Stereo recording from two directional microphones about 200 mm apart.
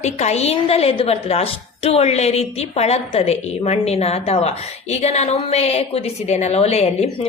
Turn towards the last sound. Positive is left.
turn(degrees=30)  # may be behind; listen again after turning